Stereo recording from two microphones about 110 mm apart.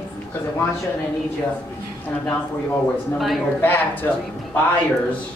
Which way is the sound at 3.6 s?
20° left (ahead or behind).